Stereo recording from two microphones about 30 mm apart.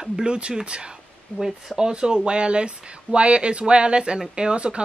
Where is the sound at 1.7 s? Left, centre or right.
Right.